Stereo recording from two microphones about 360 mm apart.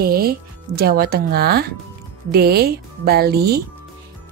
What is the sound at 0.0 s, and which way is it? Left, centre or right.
A woman's voice, right.